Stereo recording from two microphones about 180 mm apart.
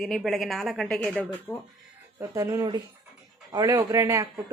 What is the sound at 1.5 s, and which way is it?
Speech, 15° left (ahead or behind).